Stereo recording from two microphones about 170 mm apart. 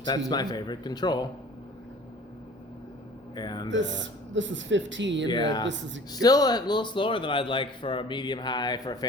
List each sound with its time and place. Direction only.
0.3 s a man's voice: 25° left (ahead or behind)
3.3 s a man's voice: 25° left (ahead or behind)
3.7 s speech: 90° right
5.3 s a man's voice: 25° left (ahead or behind)
5.6 s speech: 90° right
6.1 s a man's voice: 20° left (ahead or behind)